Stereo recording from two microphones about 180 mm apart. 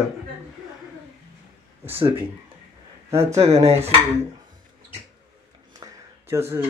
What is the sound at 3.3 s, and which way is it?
Speech, 35° right (ahead or behind).